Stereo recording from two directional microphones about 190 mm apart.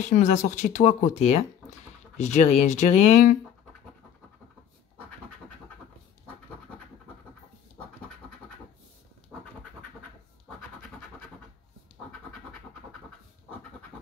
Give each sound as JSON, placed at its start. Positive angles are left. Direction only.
{"t": 0.0, "sound": "speech", "side_deg": 40}